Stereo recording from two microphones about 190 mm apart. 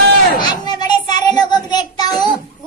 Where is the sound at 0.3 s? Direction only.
20° left (ahead or behind).